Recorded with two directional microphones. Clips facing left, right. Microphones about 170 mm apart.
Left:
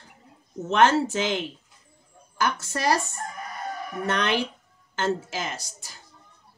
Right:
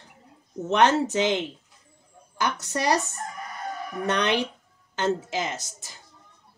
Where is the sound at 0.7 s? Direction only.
20° right (ahead or behind).